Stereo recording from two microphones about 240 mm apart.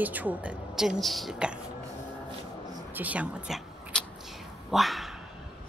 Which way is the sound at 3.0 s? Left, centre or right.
Centre.